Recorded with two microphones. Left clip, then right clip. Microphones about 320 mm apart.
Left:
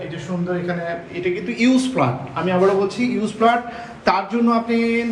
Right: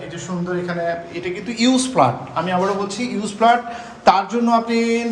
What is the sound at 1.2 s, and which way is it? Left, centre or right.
A man's voice, centre.